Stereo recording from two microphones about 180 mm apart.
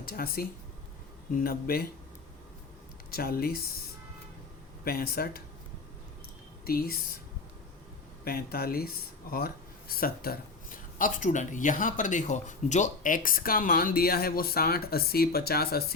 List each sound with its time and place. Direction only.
0.0 s speech: 55° left (ahead or behind)
3.1 s speech: 55° left (ahead or behind)
4.8 s speech: 55° left (ahead or behind)
6.7 s speech: 55° left (ahead or behind)
8.2 s speech: 60° left (ahead or behind)